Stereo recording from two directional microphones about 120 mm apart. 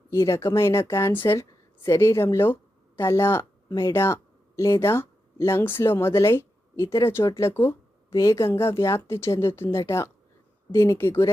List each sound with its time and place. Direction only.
0.1 s speech: 25° left (ahead or behind)